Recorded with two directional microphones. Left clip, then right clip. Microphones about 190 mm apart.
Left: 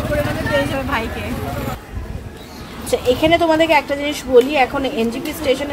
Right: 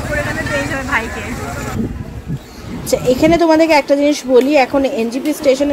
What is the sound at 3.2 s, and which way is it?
A woman's voice, 35° right (ahead or behind).